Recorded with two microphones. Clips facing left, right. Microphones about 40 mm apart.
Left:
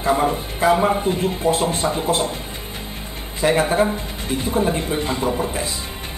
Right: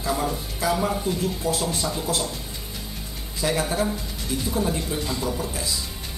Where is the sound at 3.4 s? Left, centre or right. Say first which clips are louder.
Left 7 dB; left.